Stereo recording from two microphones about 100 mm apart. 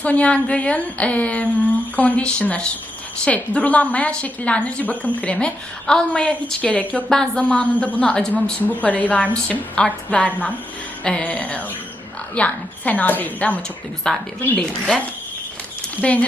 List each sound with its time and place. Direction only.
0.0 s a woman's voice: 15° left (ahead or behind)
16.0 s a woman's voice: 15° left (ahead or behind)